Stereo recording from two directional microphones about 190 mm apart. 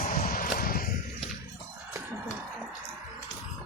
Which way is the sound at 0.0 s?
45° left (ahead or behind).